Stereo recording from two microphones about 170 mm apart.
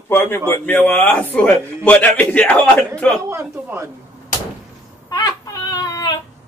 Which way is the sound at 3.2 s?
15° right (ahead or behind).